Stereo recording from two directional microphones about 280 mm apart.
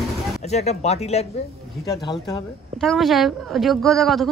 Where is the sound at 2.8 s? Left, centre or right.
Centre.